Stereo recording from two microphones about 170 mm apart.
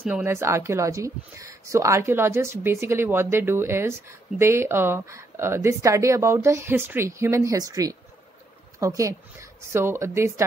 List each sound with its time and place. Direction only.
0.0 s speech: 10° right (ahead or behind)